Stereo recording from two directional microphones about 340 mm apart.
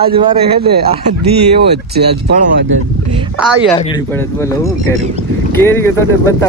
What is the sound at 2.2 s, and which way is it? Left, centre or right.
Speech, right.